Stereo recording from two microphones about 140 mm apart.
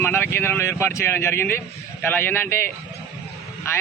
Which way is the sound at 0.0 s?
15° left (ahead or behind).